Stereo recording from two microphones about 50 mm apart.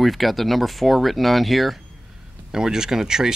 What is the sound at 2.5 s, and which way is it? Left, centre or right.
Speech, centre.